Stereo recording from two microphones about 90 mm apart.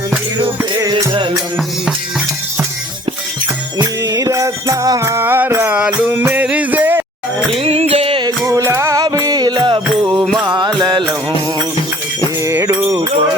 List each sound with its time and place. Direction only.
3.8 s music: 40° right (ahead or behind)
5.7 s music: 10° right (ahead or behind)
6.1 s music: 25° right (ahead or behind)
7.6 s music: 90° right
8.4 s music: 35° right (ahead or behind); by 11.0 s 55° right (ahead or behind)
12.4 s a sound: 35° right (ahead or behind)